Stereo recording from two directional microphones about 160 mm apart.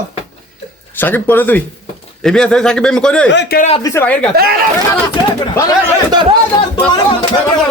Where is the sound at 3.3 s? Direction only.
85° left.